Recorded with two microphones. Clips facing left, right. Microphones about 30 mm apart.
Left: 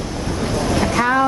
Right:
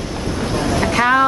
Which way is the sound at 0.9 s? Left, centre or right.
Right.